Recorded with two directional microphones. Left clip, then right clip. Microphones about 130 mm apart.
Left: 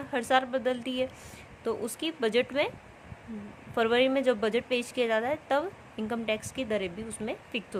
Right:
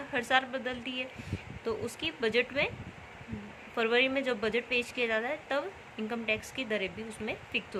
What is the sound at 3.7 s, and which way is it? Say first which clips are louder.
A woman's voice: left 3 dB; 65° left (ahead or behind).